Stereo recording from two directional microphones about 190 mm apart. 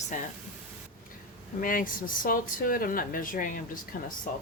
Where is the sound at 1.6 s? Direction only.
45° left (ahead or behind).